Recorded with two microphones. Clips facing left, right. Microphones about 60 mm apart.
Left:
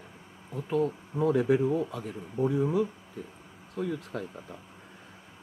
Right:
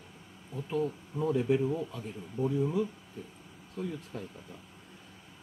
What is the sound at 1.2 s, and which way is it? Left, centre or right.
Speech, left.